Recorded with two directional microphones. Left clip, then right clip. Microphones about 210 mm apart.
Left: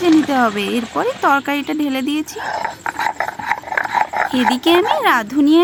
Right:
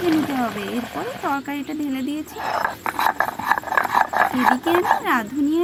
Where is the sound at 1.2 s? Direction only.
30° left (ahead or behind).